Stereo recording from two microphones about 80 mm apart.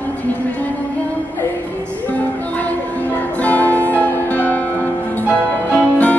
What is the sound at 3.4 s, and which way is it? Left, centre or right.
Music, centre.